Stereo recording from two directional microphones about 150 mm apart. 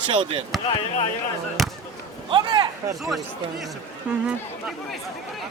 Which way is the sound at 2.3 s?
30° right (ahead or behind).